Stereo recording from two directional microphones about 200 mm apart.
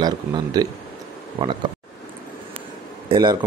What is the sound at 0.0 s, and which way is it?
Speech, 20° right (ahead or behind).